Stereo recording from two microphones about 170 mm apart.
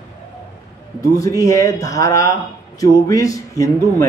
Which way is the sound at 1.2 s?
20° left (ahead or behind).